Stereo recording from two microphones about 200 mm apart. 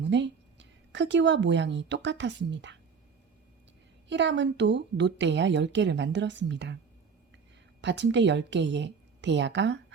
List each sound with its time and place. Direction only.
0.0 s a woman's voice: 60° right (ahead or behind)
4.1 s speech: 60° right (ahead or behind)
7.8 s speech: 60° right (ahead or behind)